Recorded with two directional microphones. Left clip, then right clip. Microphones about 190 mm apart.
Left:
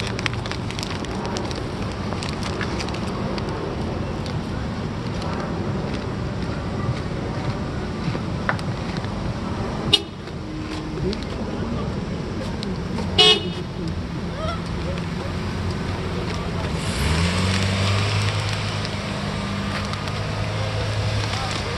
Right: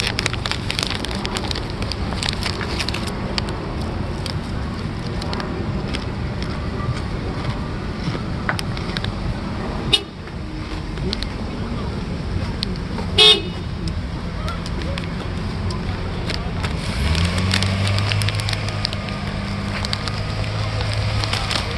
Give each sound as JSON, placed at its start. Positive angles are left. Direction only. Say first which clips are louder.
{"t": 0.0, "sound": "fire", "louder": "right 4 dB", "side_deg": -40}
{"t": 9.9, "sound": "vehicle", "louder": "even", "side_deg": -40}
{"t": 13.1, "sound": "vehicle", "louder": "right 3 dB", "side_deg": -50}